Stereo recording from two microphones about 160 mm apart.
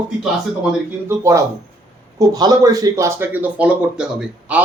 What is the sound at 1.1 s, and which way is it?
Speech, 20° right (ahead or behind).